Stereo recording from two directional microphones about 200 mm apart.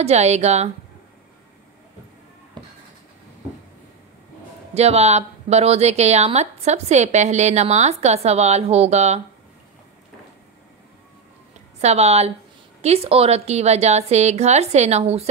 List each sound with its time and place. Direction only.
0.0 s speech: 35° right (ahead or behind)
4.7 s speech: 30° right (ahead or behind)
11.8 s speech: 30° right (ahead or behind)